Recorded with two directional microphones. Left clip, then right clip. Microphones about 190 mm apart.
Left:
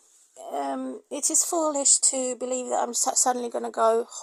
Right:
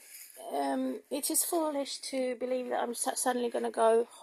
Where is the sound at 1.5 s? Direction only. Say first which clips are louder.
Left 7 dB; 30° left (ahead or behind).